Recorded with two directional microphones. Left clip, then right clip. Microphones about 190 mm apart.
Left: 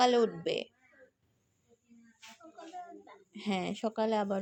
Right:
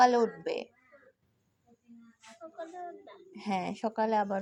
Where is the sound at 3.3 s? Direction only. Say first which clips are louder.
Right 2 dB; 30° left (ahead or behind).